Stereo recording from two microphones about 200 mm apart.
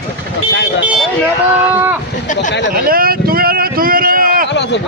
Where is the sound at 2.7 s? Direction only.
45° right (ahead or behind).